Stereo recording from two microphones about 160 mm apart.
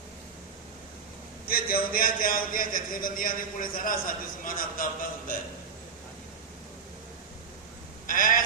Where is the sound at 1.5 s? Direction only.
65° left (ahead or behind).